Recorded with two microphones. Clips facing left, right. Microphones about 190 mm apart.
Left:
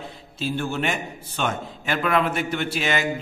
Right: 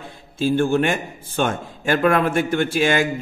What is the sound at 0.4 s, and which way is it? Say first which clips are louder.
A man's voice: right 8 dB; 50° right (ahead or behind).